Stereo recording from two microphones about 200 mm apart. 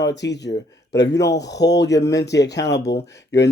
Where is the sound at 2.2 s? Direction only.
55° left (ahead or behind).